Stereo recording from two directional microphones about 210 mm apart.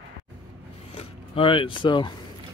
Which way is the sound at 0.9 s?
25° left (ahead or behind).